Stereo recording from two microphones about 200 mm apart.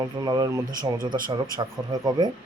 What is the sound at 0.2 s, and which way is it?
A man's voice, 20° right (ahead or behind).